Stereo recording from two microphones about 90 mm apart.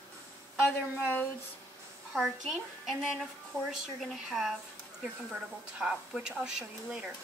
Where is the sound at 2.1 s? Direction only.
Centre (ahead or behind).